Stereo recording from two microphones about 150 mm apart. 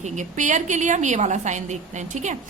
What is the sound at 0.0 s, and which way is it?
A woman's voice, 55° right (ahead or behind).